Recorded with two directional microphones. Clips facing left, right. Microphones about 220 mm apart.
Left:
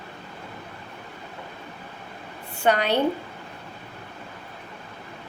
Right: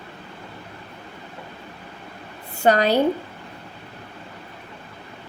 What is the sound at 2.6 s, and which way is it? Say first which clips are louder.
Speech: right 4 dB; 40° right (ahead or behind).